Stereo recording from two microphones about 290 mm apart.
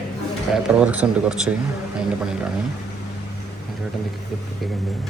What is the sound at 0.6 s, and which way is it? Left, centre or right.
Speech, centre.